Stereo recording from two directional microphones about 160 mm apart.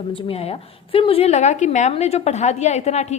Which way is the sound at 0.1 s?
35° left (ahead or behind).